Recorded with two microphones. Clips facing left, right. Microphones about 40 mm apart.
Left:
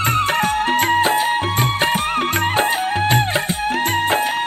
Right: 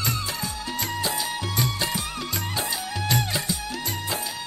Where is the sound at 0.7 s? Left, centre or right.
Left.